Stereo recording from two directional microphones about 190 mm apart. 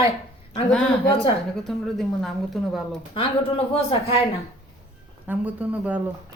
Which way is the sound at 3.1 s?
30° left (ahead or behind).